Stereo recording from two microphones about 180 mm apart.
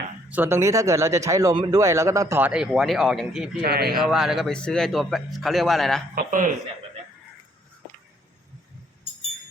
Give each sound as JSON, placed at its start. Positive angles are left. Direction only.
{"t": 0.3, "sound": "speech", "side_deg": -10}
{"t": 3.6, "sound": "a man's voice", "side_deg": -60}
{"t": 3.9, "sound": "a man's voice", "side_deg": 0}
{"t": 6.1, "sound": "speech", "side_deg": -45}